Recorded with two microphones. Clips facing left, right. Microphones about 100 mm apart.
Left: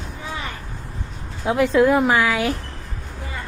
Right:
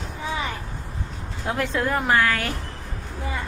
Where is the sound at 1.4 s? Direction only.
10° left (ahead or behind).